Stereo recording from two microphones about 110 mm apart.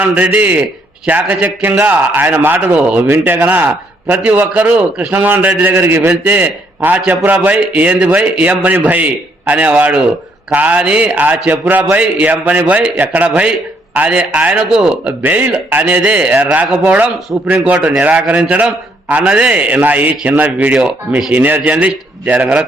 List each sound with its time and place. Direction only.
0.0 s a man's voice: 15° right (ahead or behind)